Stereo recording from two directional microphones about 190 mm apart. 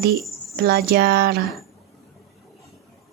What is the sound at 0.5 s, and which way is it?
Speech, 55° right (ahead or behind).